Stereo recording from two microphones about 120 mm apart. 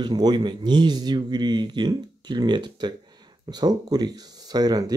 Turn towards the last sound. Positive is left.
turn(degrees=-35)  # may be behind; listen again after turning